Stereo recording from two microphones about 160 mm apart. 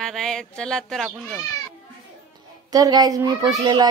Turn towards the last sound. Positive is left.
turn(degrees=-25)  # may be behind; listen again after turning